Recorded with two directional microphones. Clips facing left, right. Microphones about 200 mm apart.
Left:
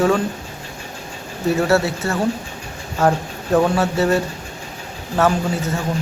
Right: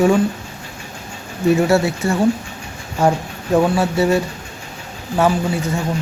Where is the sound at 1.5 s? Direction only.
15° right (ahead or behind).